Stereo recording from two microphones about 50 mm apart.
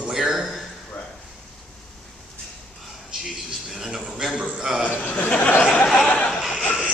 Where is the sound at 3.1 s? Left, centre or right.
Centre.